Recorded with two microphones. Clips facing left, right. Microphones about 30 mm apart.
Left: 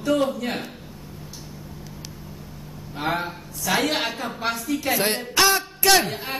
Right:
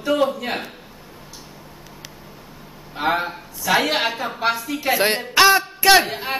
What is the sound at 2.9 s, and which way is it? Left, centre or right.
A woman's voice, centre.